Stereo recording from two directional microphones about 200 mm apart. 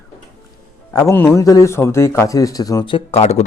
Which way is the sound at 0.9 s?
15° left (ahead or behind).